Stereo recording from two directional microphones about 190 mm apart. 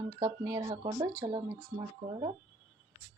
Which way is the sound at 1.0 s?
15° right (ahead or behind).